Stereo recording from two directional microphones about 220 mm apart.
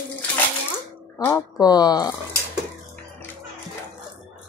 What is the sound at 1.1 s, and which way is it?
Speech, 10° left (ahead or behind).